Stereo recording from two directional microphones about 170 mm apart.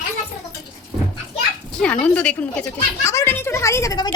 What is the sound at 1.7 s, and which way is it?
Speech, 5° left (ahead or behind).